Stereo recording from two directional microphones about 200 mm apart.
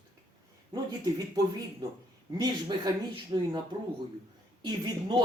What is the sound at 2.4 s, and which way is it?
Speech, 20° right (ahead or behind).